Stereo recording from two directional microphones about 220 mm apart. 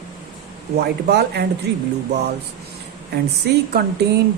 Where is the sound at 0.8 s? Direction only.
50° right (ahead or behind).